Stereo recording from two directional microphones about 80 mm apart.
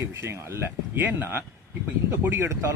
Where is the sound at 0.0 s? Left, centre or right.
Right.